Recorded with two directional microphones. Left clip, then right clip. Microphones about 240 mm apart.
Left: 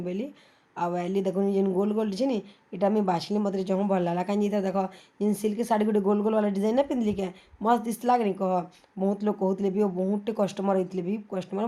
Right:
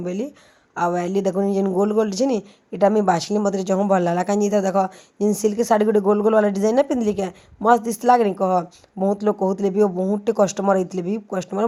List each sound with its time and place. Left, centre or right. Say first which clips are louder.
0.0 s speech: right 6 dB; right